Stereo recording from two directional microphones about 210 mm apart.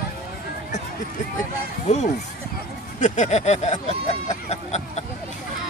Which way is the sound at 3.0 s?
35° left (ahead or behind).